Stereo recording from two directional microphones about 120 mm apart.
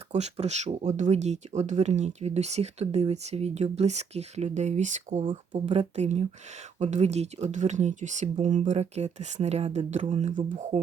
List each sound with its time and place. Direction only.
0.1 s speech: 65° right (ahead or behind)
0.8 s speech: 80° right
5.2 s speech: 45° right (ahead or behind)
5.6 s speech: 70° right (ahead or behind)
6.7 s speech: 75° right (ahead or behind)